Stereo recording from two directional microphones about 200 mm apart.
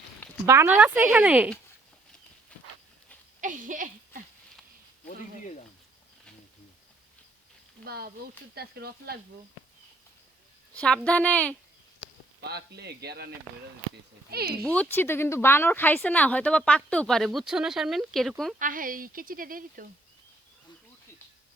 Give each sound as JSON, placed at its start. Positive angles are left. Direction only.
{"t": 0.4, "sound": "speech", "side_deg": -15}
{"t": 3.4, "sound": "a sound", "side_deg": -40}
{"t": 5.0, "sound": "a sound", "side_deg": 35}
{"t": 7.9, "sound": "a woman's voice", "side_deg": -50}
{"t": 10.8, "sound": "speech", "side_deg": 5}
{"t": 12.4, "sound": "a woman's voice", "side_deg": -55}
{"t": 14.6, "sound": "speech", "side_deg": 5}
{"t": 18.6, "sound": "a woman's voice", "side_deg": -45}